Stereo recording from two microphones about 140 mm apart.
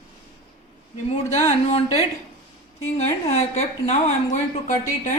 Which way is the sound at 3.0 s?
55° left (ahead or behind).